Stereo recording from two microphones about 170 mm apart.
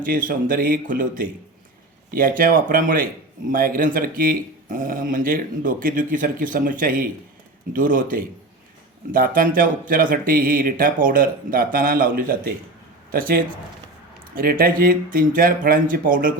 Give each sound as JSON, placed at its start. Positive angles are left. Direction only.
{"t": 0.0, "sound": "speech", "side_deg": -55}